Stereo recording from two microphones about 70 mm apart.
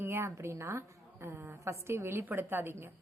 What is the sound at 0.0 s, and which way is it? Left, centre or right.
A woman's voice, right.